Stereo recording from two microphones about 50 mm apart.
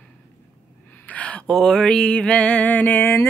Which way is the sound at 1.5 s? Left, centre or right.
Centre.